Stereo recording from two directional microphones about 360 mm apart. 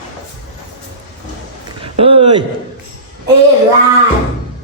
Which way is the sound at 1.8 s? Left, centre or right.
Centre.